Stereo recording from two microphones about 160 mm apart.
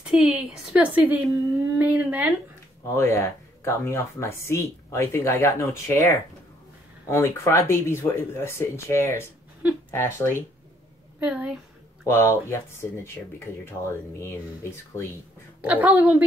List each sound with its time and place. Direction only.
0.1 s a woman's voice: centre (ahead or behind)
2.9 s speech: 15° left (ahead or behind)
11.1 s a woman's voice: 10° right (ahead or behind)
12.1 s speech: 15° left (ahead or behind)
15.6 s a woman's voice: 10° right (ahead or behind)